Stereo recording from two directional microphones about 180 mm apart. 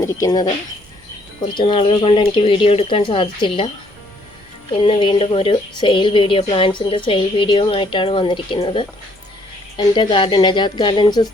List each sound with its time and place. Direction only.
0.0 s speech: 20° left (ahead or behind)
1.5 s speech: 25° left (ahead or behind)
4.7 s speech: 30° left (ahead or behind)